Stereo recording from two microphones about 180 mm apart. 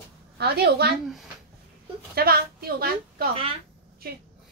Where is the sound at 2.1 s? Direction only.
55° right (ahead or behind).